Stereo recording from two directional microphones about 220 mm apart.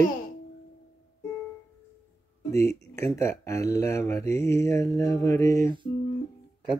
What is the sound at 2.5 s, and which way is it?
Speech, 15° left (ahead or behind).